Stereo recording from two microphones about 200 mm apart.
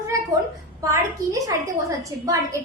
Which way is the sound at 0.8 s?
15° right (ahead or behind).